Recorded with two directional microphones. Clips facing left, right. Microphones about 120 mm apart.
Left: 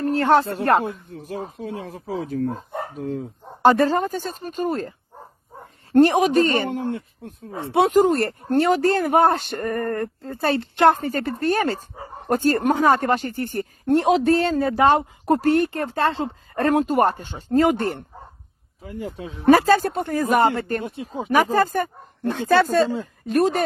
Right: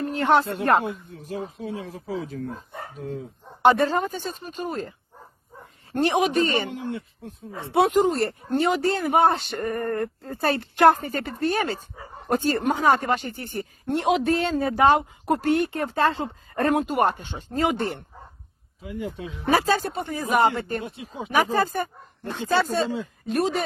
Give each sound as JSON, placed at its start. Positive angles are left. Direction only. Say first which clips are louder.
{"t": 0.0, "sound": "speech", "louder": "left 3 dB", "side_deg": 40}
{"t": 3.6, "sound": "speech", "louder": "left 2 dB", "side_deg": 40}
{"t": 7.5, "sound": "speech", "louder": "left 2 dB", "side_deg": 25}
{"t": 7.9, "sound": "speech", "louder": "left 3 dB", "side_deg": 45}
{"t": 11.0, "sound": "speech", "louder": "left 3 dB", "side_deg": 40}